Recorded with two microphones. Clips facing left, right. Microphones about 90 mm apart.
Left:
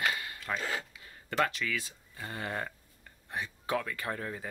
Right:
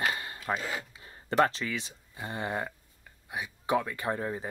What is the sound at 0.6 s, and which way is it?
Speech, 10° right (ahead or behind).